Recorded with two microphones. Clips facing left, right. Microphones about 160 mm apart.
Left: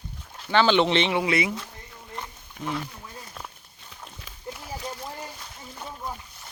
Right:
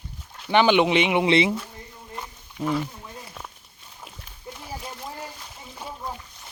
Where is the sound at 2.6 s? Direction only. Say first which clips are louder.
Right 6 dB; 50° left (ahead or behind).